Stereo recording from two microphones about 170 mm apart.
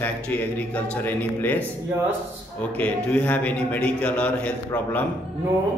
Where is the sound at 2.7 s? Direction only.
10° left (ahead or behind).